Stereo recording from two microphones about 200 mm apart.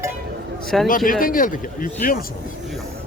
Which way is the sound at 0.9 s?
45° left (ahead or behind).